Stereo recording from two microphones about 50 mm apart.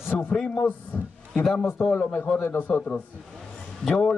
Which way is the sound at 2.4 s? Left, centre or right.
Left.